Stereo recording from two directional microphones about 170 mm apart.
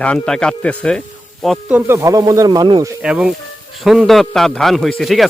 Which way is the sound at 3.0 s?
5° right (ahead or behind).